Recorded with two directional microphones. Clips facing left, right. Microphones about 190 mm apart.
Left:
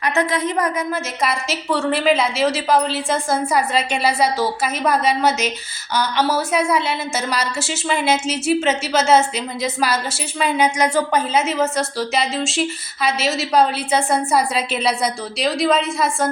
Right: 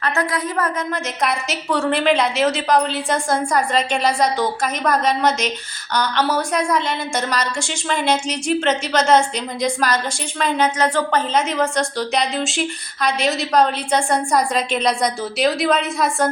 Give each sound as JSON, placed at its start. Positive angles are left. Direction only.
{"t": 0.0, "sound": "a woman's voice", "side_deg": 20}
{"t": 1.2, "sound": "a woman's voice", "side_deg": 0}